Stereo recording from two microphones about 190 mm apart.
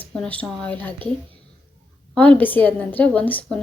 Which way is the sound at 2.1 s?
5° left (ahead or behind).